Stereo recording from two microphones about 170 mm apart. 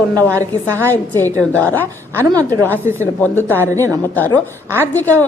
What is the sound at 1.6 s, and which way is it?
Speech, 10° left (ahead or behind).